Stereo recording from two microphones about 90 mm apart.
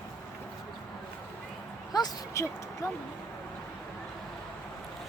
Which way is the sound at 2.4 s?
35° left (ahead or behind).